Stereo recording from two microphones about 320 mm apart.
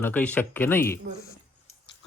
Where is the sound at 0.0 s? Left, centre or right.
Centre.